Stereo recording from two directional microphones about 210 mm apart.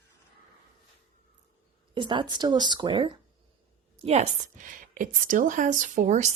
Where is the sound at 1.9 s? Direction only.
20° right (ahead or behind).